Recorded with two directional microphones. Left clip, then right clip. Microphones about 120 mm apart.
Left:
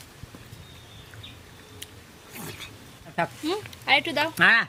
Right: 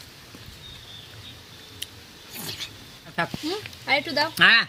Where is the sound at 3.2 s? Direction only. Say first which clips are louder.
Even; centre (ahead or behind).